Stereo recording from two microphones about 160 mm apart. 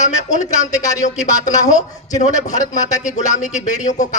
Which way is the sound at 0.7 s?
20° left (ahead or behind).